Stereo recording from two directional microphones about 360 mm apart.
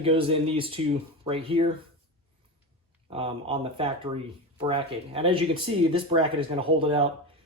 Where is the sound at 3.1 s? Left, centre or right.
Centre.